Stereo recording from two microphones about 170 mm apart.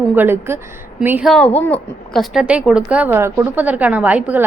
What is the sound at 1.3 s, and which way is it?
A woman's voice, 5° left (ahead or behind).